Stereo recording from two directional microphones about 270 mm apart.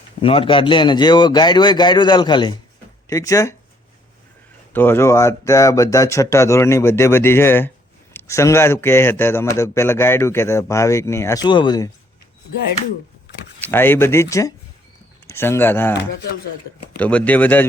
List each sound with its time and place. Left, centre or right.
0.2 s a man's voice: centre
4.7 s a man's voice: centre
13.6 s a man's voice: centre
17.0 s speech: centre